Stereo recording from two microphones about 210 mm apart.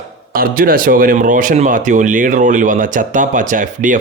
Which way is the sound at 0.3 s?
45° right (ahead or behind).